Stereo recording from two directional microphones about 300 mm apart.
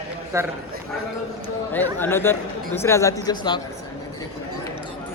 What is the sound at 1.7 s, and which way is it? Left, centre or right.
Speech, centre.